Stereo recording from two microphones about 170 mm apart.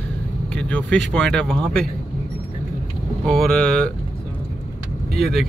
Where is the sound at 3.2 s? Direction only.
5° left (ahead or behind).